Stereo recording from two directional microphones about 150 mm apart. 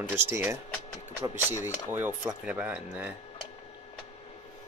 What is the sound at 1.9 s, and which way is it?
Speech, 15° right (ahead or behind).